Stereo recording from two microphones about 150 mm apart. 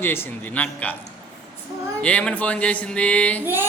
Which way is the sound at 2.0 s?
10° left (ahead or behind).